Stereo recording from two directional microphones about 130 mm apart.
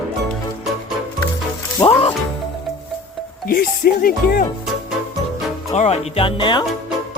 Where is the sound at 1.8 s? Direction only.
35° left (ahead or behind).